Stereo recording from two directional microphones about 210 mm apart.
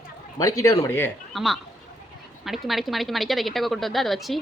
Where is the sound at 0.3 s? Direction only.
15° left (ahead or behind).